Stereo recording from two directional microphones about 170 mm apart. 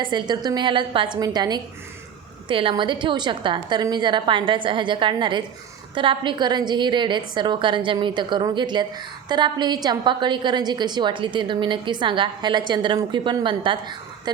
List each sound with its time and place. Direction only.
0.0 s a woman's voice: 25° right (ahead or behind)